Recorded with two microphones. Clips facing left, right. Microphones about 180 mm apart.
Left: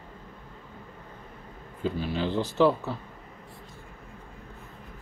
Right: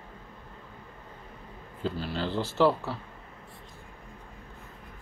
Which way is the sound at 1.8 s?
15° left (ahead or behind).